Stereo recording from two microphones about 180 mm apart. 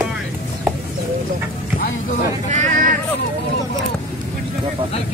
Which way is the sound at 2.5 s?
45° right (ahead or behind).